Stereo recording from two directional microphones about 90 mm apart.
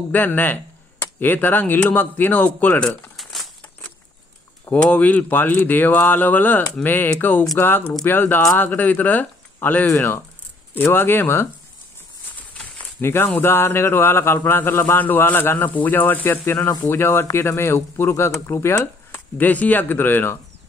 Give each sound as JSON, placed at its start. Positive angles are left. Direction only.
{"t": 0.1, "sound": "speech", "side_deg": 20}
{"t": 3.2, "sound": "crumpling", "side_deg": 0}
{"t": 4.7, "sound": "speech", "side_deg": 15}
{"t": 12.5, "sound": "speech", "side_deg": 20}